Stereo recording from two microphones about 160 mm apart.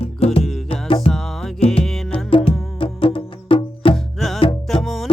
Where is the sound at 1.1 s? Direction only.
Centre (ahead or behind).